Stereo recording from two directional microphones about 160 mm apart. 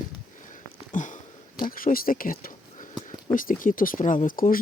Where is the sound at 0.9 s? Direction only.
55° left (ahead or behind).